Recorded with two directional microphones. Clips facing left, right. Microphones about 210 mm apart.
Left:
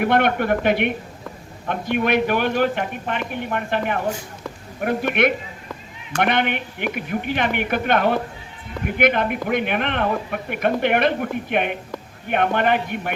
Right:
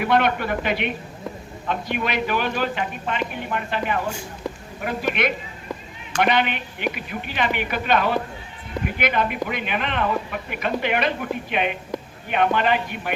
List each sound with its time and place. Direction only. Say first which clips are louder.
0.0 s speech: left 2 dB; 55° left (ahead or behind)